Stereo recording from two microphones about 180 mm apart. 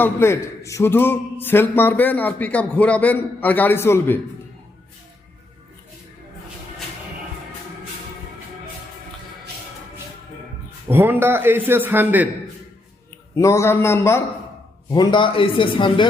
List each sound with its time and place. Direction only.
0.0 s a man's voice: 15° left (ahead or behind)
10.8 s a man's voice: 10° right (ahead or behind)
13.3 s a man's voice: 15° left (ahead or behind)
14.8 s speech: 25° left (ahead or behind)